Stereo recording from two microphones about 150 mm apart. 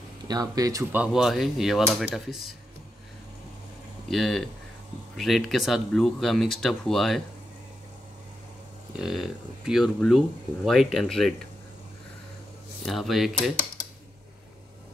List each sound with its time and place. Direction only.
0.3 s speech: 25° right (ahead or behind)
0.9 s speech: 5° right (ahead or behind)
4.1 s speech: centre (ahead or behind)
8.9 s speech: centre (ahead or behind)
12.8 s speech: centre (ahead or behind)